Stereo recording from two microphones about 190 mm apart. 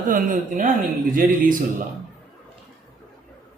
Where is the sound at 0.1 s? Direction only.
45° right (ahead or behind).